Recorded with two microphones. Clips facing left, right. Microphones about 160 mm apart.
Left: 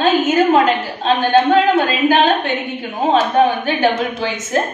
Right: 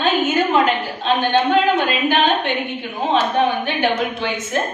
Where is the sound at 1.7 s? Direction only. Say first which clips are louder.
Left 4 dB; 40° left (ahead or behind).